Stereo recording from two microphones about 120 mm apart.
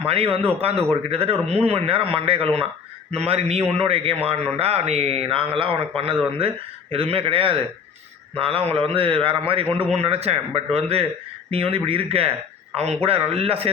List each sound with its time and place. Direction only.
0.4 s a man's voice: 55° right (ahead or behind)